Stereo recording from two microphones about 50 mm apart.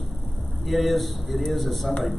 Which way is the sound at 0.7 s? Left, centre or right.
Centre.